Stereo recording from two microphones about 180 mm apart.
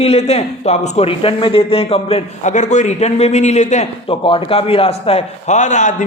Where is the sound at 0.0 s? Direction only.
35° left (ahead or behind).